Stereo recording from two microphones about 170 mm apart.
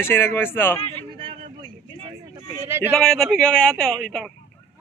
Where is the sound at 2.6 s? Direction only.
15° right (ahead or behind).